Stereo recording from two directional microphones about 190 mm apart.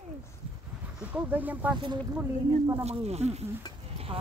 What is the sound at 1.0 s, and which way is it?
Speech, 5° right (ahead or behind).